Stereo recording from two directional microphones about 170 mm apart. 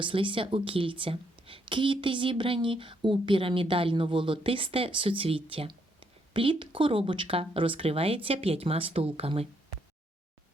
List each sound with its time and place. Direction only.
0.0 s a woman's voice: 30° right (ahead or behind)